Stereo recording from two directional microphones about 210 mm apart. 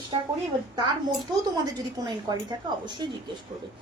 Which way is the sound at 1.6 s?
20° right (ahead or behind).